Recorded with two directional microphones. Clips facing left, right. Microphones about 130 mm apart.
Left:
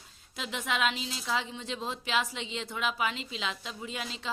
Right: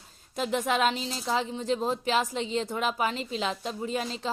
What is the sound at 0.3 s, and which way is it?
A woman's voice, 45° right (ahead or behind).